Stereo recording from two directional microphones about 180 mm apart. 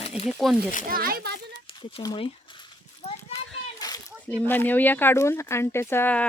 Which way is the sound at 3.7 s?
20° left (ahead or behind).